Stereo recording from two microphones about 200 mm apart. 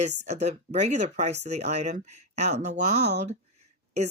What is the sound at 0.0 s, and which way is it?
Speech, 35° right (ahead or behind).